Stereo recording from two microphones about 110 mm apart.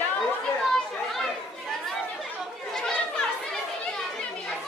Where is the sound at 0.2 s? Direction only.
Centre (ahead or behind).